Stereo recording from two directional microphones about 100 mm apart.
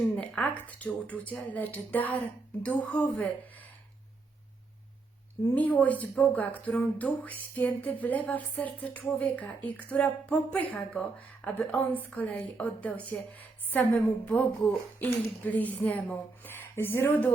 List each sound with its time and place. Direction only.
0.2 s speech: 15° left (ahead or behind)
5.5 s a woman's voice: 15° left (ahead or behind)